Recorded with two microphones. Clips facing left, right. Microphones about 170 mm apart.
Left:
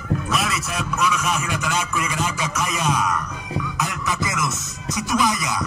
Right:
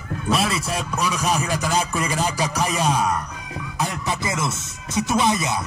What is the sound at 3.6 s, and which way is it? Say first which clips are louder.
Speech: right 1 dB; 30° right (ahead or behind).